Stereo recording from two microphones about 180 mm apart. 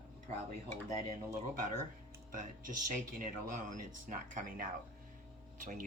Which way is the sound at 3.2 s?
45° right (ahead or behind).